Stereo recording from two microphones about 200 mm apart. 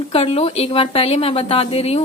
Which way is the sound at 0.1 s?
30° left (ahead or behind).